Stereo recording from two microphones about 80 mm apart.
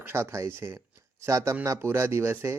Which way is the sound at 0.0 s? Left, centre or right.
Right.